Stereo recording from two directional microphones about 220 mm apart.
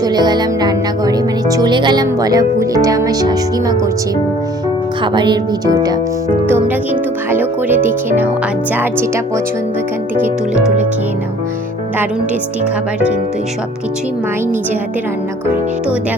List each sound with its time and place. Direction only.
0.0 s speech: 20° right (ahead or behind)
5.1 s speech: 20° right (ahead or behind)